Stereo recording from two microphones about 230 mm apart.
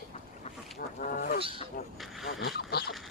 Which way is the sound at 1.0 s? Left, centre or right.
Left.